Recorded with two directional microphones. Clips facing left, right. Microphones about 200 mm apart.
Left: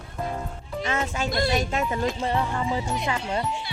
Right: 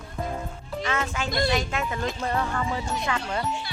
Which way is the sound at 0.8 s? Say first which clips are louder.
Left 1 dB; 20° left (ahead or behind).